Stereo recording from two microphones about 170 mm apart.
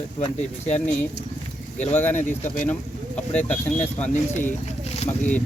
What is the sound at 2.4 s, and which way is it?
Speech, 50° left (ahead or behind).